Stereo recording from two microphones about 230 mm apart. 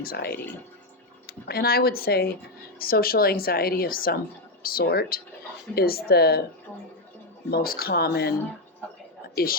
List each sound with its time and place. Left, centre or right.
0.0 s speech: left
7.5 s a woman's voice: left